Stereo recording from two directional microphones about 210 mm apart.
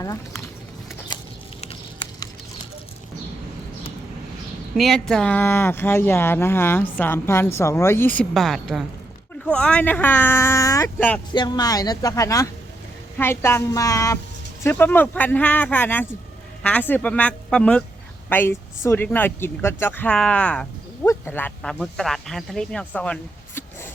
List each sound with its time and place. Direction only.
0.0 s speech: 15° left (ahead or behind)
4.8 s speech: centre (ahead or behind)
11.3 s speech: 20° left (ahead or behind)